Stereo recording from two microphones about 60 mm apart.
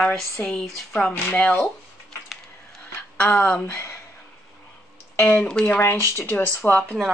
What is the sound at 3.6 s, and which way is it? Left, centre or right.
Speech, left.